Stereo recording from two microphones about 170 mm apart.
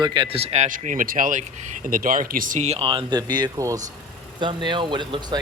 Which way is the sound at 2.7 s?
30° right (ahead or behind).